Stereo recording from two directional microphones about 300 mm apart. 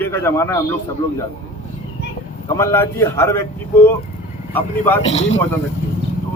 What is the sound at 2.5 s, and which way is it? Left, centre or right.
A man's voice, centre.